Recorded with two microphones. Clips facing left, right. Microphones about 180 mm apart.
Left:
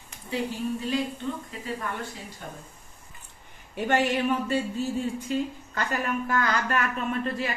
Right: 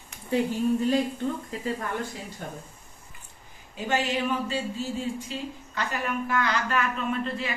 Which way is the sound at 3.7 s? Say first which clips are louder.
Left 3 dB; 60° left (ahead or behind).